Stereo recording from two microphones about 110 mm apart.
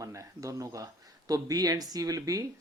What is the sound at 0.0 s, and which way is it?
Speech, 30° right (ahead or behind).